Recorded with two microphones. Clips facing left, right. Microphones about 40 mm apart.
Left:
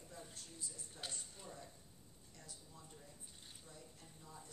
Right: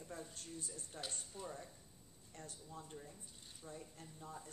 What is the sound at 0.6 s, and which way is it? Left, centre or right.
Speech, right.